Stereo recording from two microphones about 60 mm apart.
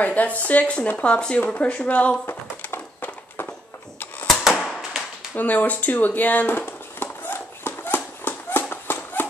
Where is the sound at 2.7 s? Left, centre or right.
Left.